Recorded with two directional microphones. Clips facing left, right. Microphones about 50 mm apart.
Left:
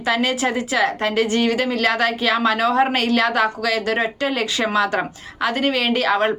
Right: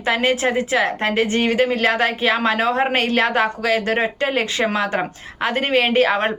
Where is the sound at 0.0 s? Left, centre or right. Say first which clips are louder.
Right 1 dB; right.